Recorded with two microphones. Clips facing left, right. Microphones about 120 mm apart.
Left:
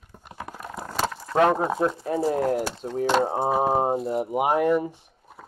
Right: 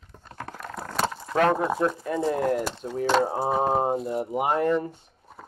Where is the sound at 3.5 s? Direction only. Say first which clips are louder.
Left 2 dB; 5° left (ahead or behind).